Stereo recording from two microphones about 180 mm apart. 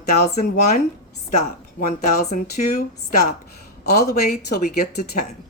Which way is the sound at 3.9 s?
60° left (ahead or behind).